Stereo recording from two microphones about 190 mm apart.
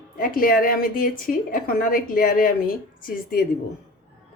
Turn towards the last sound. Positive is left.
turn(degrees=50)  # may be behind; listen again after turning